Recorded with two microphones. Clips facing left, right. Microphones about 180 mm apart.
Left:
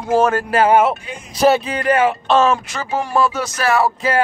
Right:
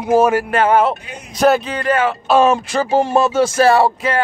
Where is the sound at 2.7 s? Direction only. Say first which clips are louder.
Right 6 dB; 30° right (ahead or behind).